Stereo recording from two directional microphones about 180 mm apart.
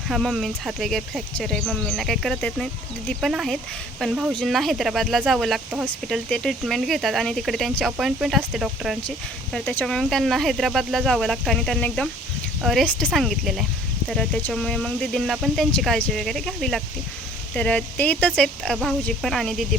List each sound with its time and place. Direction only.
0.1 s speech: centre (ahead or behind)